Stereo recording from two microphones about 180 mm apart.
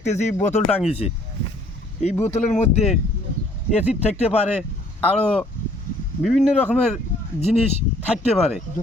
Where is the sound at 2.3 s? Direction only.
40° left (ahead or behind).